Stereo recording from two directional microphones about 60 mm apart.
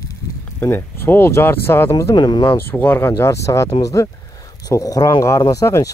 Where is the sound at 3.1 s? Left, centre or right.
Left.